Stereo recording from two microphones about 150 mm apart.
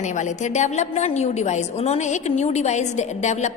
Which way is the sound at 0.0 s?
55° left (ahead or behind).